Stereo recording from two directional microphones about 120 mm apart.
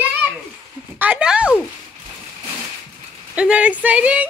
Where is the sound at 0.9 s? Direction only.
10° right (ahead or behind).